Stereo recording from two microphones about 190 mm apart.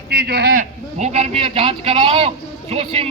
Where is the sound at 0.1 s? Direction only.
55° right (ahead or behind).